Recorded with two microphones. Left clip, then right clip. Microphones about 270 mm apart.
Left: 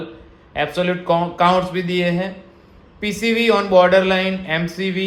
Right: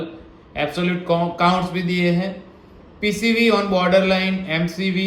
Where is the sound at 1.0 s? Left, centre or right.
Centre.